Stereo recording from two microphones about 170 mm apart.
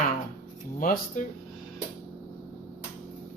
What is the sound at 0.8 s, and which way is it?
Speech, 55° left (ahead or behind).